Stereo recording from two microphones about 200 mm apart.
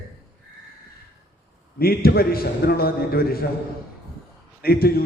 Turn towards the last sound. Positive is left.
turn(degrees=50)  # may be behind; listen again after turning